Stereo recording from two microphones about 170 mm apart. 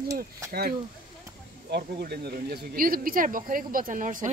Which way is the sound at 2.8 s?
55° right (ahead or behind).